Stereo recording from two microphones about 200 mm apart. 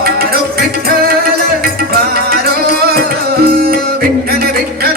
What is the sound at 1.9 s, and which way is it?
Music, 50° right (ahead or behind).